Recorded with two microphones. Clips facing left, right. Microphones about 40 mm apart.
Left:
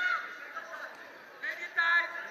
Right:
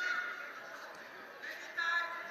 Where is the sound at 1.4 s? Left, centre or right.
Left.